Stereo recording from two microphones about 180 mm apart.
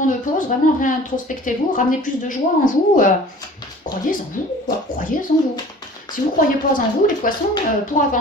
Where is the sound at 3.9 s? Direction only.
45° left (ahead or behind).